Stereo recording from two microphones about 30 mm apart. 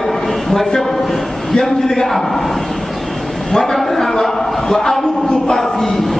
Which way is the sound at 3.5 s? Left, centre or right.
Centre.